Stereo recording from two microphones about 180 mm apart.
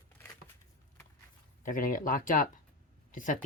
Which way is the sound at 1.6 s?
50° left (ahead or behind).